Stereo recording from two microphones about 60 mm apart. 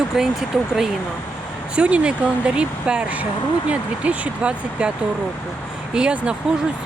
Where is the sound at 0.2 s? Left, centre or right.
Centre.